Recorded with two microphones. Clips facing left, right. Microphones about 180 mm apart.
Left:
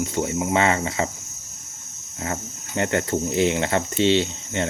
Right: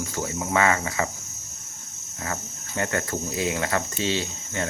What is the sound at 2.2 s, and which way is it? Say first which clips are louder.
Speech: left 3 dB; 25° left (ahead or behind).